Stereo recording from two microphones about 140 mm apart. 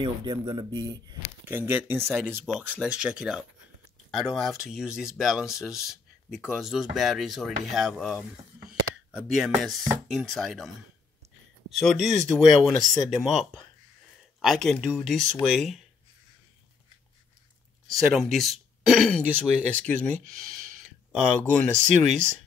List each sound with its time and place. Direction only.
0.0 s speech: 30° right (ahead or behind)
1.4 s speech: 15° right (ahead or behind)
11.8 s speech: centre (ahead or behind)
17.9 s speech: centre (ahead or behind)
21.9 s speech: 55° right (ahead or behind)